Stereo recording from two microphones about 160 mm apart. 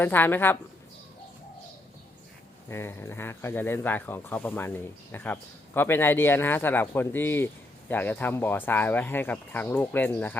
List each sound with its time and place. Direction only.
0.0 s speech: 15° left (ahead or behind)
2.6 s speech: 15° left (ahead or behind)